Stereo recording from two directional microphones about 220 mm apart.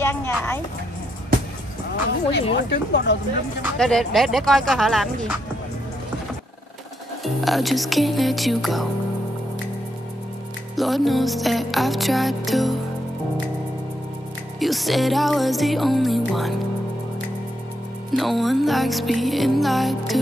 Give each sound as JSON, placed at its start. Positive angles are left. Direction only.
{"t": 0.0, "sound": "speech", "side_deg": 10}
{"t": 2.5, "sound": "speech", "side_deg": 50}
{"t": 3.7, "sound": "music", "side_deg": 0}
{"t": 7.4, "sound": "music", "side_deg": 0}
{"t": 10.8, "sound": "music", "side_deg": 0}
{"t": 14.6, "sound": "music", "side_deg": 0}
{"t": 18.1, "sound": "music", "side_deg": 0}